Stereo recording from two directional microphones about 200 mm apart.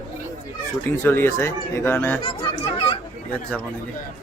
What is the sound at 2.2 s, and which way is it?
Speech, 25° left (ahead or behind).